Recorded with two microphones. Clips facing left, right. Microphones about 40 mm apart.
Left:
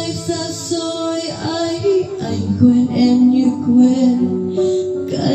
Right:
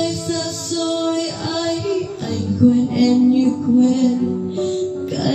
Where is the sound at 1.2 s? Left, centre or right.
Centre.